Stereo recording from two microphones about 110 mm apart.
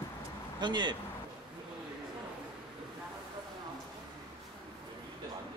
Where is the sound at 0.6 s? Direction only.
45° right (ahead or behind).